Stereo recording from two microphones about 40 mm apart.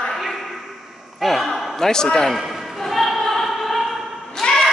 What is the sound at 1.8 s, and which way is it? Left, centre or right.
Speech, centre.